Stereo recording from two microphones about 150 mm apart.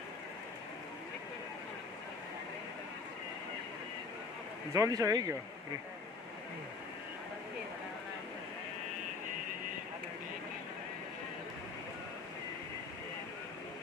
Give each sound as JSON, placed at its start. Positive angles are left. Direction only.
{"t": 4.7, "sound": "speech", "side_deg": -20}